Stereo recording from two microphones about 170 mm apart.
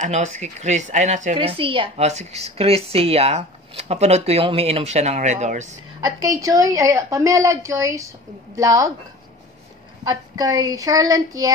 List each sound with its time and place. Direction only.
0.0 s speech: 45° right (ahead or behind)
1.3 s a woman's voice: 30° right (ahead or behind)
5.9 s a woman's voice: 20° right (ahead or behind)
10.0 s a woman's voice: 20° right (ahead or behind)